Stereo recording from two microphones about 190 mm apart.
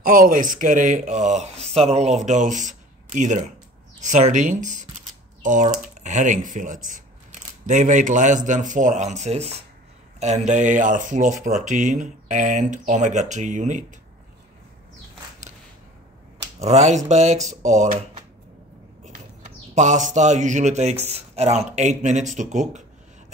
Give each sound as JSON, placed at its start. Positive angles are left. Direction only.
{"t": 0.0, "sound": "speech", "side_deg": -45}
{"t": 16.5, "sound": "speech", "side_deg": -35}